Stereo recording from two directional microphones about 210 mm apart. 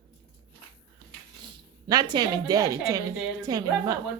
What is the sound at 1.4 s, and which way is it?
A woman's voice, 20° right (ahead or behind).